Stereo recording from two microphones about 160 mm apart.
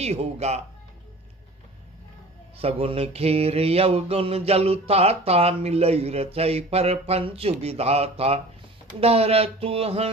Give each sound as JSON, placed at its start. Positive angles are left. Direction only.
{"t": 0.0, "sound": "speech", "side_deg": -45}
{"t": 2.6, "sound": "mantra", "side_deg": -35}